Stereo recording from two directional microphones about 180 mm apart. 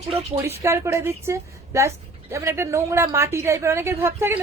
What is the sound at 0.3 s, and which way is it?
A woman's voice, 15° right (ahead or behind).